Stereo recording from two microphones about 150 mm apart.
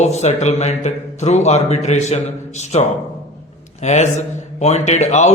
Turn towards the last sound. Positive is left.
turn(degrees=50)  # may be behind; listen again after turning